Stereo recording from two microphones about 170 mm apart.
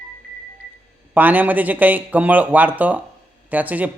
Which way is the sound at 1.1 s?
10° right (ahead or behind).